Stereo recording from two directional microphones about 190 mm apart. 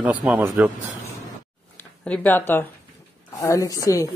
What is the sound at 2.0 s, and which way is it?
Speech, 5° left (ahead or behind).